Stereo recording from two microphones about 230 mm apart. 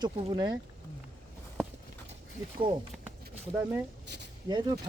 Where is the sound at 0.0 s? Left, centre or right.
Centre.